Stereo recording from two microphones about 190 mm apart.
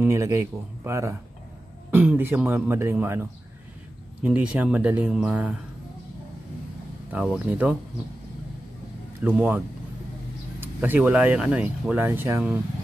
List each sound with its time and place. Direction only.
0.0 s speech: 15° right (ahead or behind)
7.1 s speech: 5° right (ahead or behind)
9.2 s speech: 10° right (ahead or behind)
10.6 s speech: 10° right (ahead or behind)